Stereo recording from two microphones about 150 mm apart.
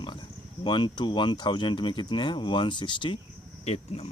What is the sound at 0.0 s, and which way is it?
Speech, 30° left (ahead or behind).